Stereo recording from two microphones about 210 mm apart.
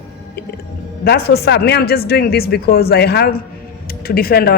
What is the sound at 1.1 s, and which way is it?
A woman's voice, 50° left (ahead or behind).